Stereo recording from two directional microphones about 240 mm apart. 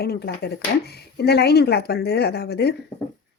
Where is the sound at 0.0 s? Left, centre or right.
Left.